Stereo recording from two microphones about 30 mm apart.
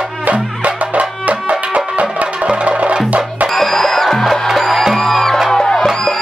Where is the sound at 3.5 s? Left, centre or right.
Centre.